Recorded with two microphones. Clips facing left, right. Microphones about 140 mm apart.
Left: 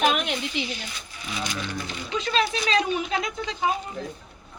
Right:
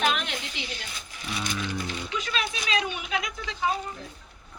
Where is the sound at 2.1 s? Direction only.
30° left (ahead or behind).